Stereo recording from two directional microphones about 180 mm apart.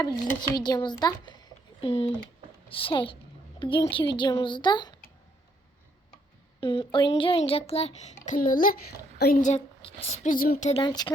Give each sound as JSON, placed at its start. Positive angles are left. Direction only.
{"t": 0.3, "sound": "a child's voice", "side_deg": 25}
{"t": 6.6, "sound": "a child's voice", "side_deg": 30}
{"t": 9.4, "sound": "speech", "side_deg": 35}
{"t": 10.2, "sound": "speech", "side_deg": 50}
{"t": 10.7, "sound": "a woman's voice", "side_deg": 30}